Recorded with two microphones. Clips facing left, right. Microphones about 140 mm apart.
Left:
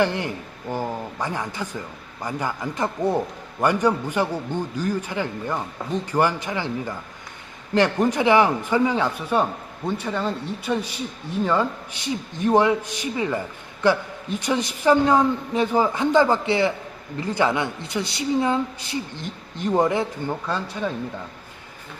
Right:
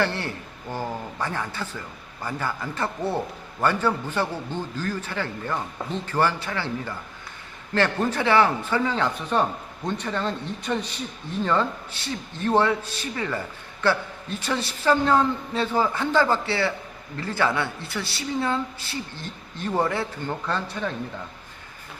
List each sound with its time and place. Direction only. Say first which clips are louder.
0.0 s speech: left 4 dB; 15° left (ahead or behind)